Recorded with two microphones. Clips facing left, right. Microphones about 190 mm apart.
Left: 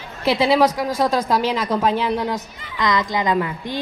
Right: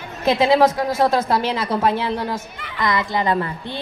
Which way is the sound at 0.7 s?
15° left (ahead or behind).